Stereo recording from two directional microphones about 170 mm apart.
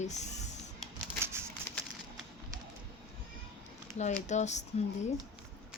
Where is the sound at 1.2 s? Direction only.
15° right (ahead or behind).